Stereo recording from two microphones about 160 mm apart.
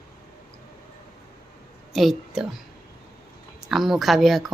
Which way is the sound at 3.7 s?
Centre (ahead or behind).